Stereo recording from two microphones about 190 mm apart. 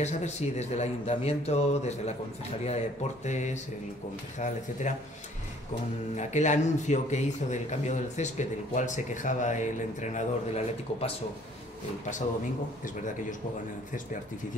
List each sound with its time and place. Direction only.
0.0 s a man's voice: 35° left (ahead or behind)
6.1 s a man's voice: 40° left (ahead or behind)